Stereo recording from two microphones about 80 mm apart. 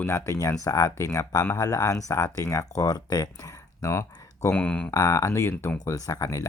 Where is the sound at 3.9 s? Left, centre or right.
Left.